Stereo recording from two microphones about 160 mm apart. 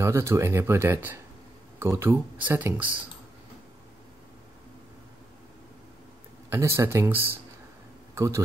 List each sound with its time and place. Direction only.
0.0 s speech: 15° right (ahead or behind)
6.5 s speech: 15° right (ahead or behind)
8.1 s a sound: 20° right (ahead or behind)